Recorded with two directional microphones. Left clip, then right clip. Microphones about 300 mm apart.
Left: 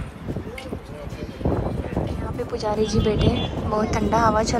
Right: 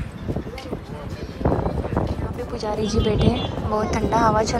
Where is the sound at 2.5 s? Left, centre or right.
Centre.